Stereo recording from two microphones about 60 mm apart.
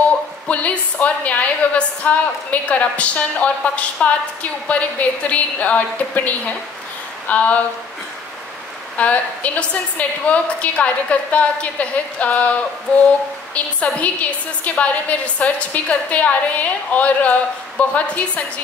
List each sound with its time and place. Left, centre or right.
0.5 s a woman's voice: left
8.9 s a woman's voice: left
13.7 s a woman's voice: left